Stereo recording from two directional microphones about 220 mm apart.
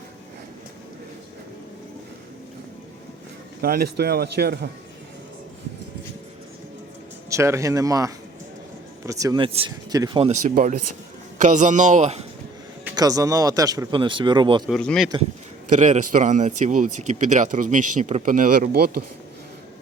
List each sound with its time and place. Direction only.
3.6 s speech: 45° right (ahead or behind)
7.3 s speech: 15° right (ahead or behind)
10.4 s speech: 40° right (ahead or behind)
12.8 s speech: 15° right (ahead or behind)
14.7 s speech: centre (ahead or behind)
15.7 s speech: 35° right (ahead or behind)